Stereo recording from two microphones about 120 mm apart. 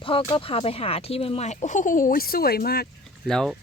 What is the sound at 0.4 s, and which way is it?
Speech, 55° left (ahead or behind).